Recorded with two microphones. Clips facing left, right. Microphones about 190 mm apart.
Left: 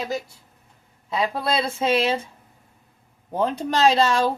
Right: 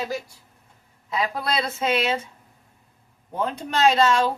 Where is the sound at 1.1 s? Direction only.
25° left (ahead or behind).